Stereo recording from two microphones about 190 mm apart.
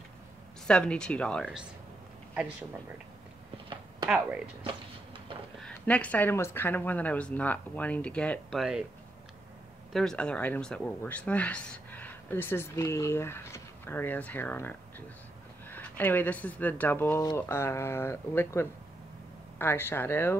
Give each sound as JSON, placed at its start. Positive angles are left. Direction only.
{"t": 0.7, "sound": "speech", "side_deg": 5}
{"t": 4.6, "sound": "a sound", "side_deg": -25}
{"t": 5.6, "sound": "speech", "side_deg": 5}
{"t": 9.9, "sound": "speech", "side_deg": 5}